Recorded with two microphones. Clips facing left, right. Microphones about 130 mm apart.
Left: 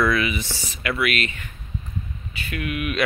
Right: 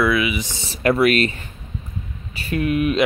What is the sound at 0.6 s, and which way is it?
Speech, 35° right (ahead or behind).